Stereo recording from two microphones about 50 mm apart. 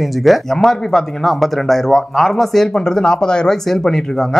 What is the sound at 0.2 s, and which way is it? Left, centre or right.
Speech, centre.